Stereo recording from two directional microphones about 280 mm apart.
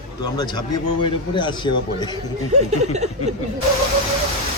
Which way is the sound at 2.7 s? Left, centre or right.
Right.